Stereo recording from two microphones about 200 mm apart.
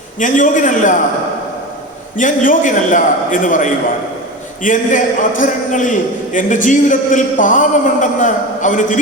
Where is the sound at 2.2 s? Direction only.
40° left (ahead or behind).